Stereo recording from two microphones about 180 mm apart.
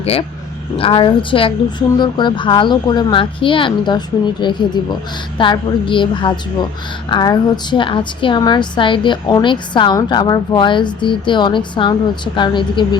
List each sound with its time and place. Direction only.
0.0 s a woman's voice: 30° left (ahead or behind)